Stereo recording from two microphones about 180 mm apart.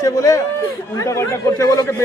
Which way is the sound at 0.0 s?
20° left (ahead or behind).